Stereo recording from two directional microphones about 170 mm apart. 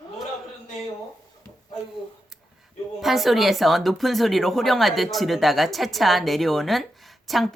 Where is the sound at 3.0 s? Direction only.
Centre (ahead or behind).